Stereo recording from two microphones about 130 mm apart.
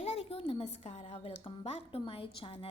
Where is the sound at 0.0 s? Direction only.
55° left (ahead or behind).